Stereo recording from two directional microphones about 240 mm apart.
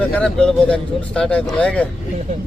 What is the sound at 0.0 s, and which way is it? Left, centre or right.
Speech, centre.